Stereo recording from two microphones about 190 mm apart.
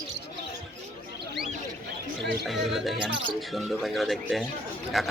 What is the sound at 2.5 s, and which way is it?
Speech, centre (ahead or behind).